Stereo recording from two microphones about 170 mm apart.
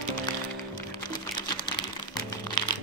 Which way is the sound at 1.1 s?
25° left (ahead or behind).